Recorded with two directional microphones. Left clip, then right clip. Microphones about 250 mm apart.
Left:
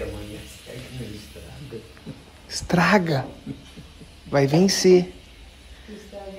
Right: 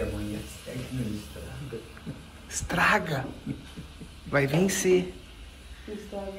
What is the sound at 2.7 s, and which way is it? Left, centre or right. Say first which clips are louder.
Speech: left 3 dB; left.